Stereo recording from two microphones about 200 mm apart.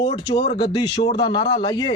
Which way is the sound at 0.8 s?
55° left (ahead or behind).